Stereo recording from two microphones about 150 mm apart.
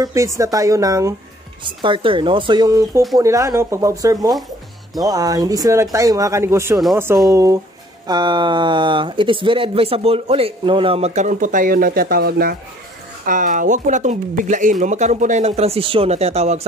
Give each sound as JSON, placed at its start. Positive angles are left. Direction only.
{"t": 0.0, "sound": "speech", "side_deg": -20}
{"t": 1.6, "sound": "speech", "side_deg": -35}
{"t": 13.2, "sound": "speech", "side_deg": -60}